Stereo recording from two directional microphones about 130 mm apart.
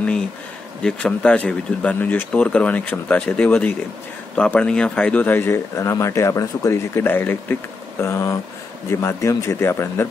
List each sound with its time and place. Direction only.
0.8 s speech: 5° left (ahead or behind)